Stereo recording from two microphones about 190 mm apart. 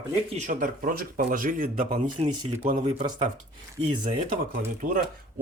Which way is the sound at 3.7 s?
25° right (ahead or behind).